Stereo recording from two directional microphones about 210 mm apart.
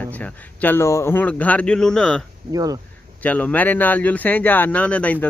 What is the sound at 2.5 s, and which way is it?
Speech, 15° right (ahead or behind).